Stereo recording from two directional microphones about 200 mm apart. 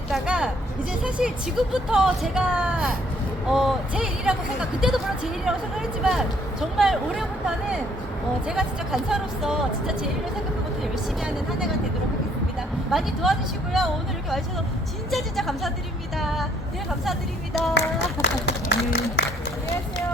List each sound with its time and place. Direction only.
0.1 s speech: centre (ahead or behind)
11.2 s speech: 5° right (ahead or behind)
12.9 s speech: centre (ahead or behind)
17.7 s speech: 60° left (ahead or behind)